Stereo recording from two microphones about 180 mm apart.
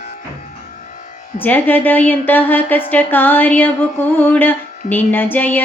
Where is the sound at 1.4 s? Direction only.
10° left (ahead or behind).